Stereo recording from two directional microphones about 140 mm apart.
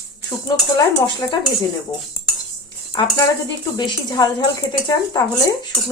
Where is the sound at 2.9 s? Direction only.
30° left (ahead or behind).